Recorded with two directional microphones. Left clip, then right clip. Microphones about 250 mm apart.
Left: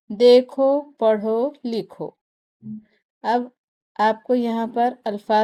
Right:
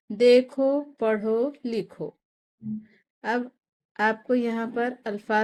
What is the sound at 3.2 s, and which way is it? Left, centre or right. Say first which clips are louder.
A woman's voice: left 6 dB; left.